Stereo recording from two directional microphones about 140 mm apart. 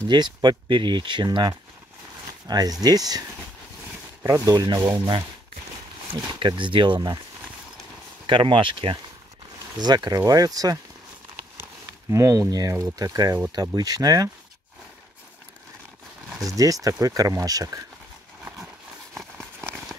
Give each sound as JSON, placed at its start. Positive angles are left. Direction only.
{"t": 0.1, "sound": "speech", "side_deg": -30}
{"t": 4.2, "sound": "speech", "side_deg": -25}
{"t": 6.4, "sound": "speech", "side_deg": -35}
{"t": 8.3, "sound": "speech", "side_deg": -35}
{"t": 12.1, "sound": "speech", "side_deg": -20}
{"t": 16.4, "sound": "speech", "side_deg": -25}